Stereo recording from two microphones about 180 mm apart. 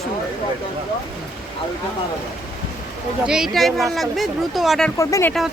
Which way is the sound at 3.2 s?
Centre (ahead or behind).